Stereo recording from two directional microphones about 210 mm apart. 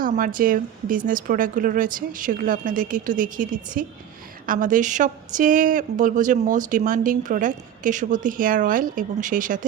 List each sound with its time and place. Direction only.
0.3 s speech: 40° right (ahead or behind)